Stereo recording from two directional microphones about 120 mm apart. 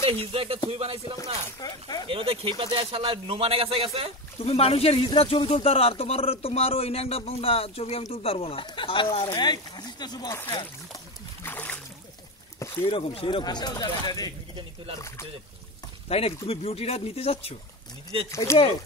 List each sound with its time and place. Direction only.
0.0 s speech: 50° right (ahead or behind)
1.6 s speech: 35° left (ahead or behind)
2.0 s speech: 50° right (ahead or behind)
4.4 s speech: 55° left (ahead or behind); by 10.4 s 30° left (ahead or behind)
11.4 s boat: 15° left (ahead or behind)
12.5 s a sound: 25° left (ahead or behind)
12.8 s speech: 50° left (ahead or behind)
13.4 s speech: 35° left (ahead or behind)
16.1 s speech: 55° left (ahead or behind)
18.5 s speech: 20° left (ahead or behind)